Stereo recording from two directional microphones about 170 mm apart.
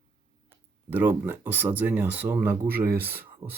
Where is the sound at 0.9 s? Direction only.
10° right (ahead or behind).